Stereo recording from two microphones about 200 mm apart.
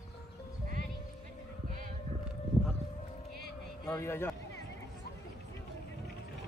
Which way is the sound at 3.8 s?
15° left (ahead or behind).